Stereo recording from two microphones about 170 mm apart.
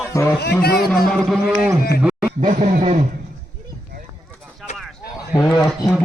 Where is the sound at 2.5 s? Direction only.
40° right (ahead or behind).